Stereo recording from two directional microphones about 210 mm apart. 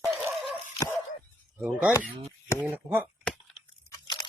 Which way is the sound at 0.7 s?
15° left (ahead or behind).